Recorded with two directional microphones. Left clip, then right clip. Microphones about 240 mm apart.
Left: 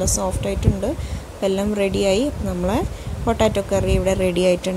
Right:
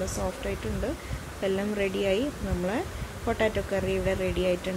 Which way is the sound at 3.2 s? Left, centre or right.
Left.